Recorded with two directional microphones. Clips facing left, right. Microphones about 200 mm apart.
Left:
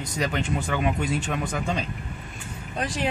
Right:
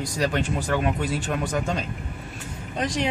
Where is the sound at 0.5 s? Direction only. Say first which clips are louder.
Right 1 dB; 5° right (ahead or behind).